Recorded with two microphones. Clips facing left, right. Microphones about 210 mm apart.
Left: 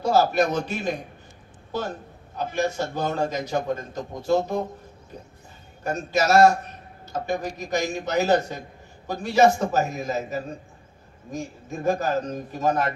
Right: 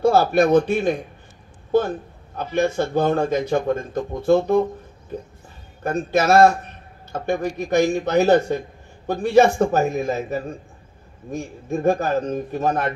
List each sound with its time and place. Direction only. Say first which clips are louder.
0.0 s a man's voice: right 4 dB; 55° right (ahead or behind)
5.8 s a man's voice: right 4 dB; 55° right (ahead or behind)